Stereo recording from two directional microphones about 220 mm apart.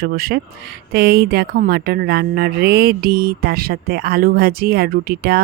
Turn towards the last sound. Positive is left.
turn(degrees=-45)  # may be behind; listen again after turning